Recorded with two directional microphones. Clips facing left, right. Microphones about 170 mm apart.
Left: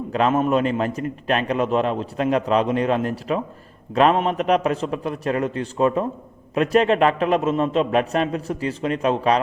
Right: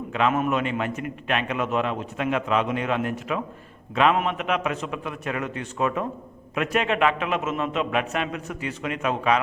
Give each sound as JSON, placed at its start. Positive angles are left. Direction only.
{"t": 0.1, "sound": "a man's voice", "side_deg": 35}